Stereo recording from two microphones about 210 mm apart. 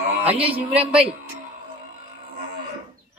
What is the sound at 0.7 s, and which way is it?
Speech, 5° right (ahead or behind).